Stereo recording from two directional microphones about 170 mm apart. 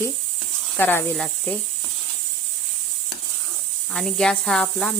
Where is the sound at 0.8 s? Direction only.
10° left (ahead or behind).